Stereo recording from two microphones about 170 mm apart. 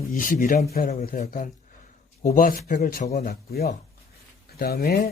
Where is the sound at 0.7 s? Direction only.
60° left (ahead or behind).